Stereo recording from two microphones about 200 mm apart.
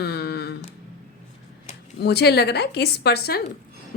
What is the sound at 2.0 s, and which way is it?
A woman's voice, 55° left (ahead or behind).